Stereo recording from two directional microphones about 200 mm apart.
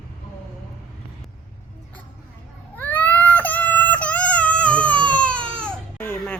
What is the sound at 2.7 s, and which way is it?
Baby cry, 10° left (ahead or behind).